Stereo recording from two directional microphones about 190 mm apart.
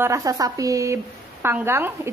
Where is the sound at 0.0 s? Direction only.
15° right (ahead or behind).